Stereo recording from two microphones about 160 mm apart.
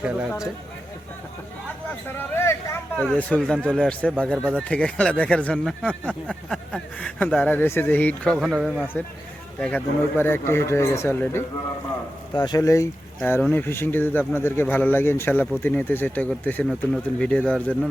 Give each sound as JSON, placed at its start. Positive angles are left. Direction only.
{"t": 0.0, "sound": "speech", "side_deg": -5}
{"t": 2.1, "sound": "a sound", "side_deg": 15}
{"t": 3.0, "sound": "speech", "side_deg": 5}
{"t": 13.1, "sound": "speech", "side_deg": 10}